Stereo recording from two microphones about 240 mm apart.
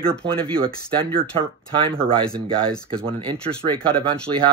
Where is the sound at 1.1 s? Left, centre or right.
Right.